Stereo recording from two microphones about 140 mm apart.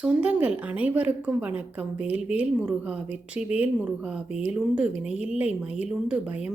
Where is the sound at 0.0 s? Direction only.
10° right (ahead or behind).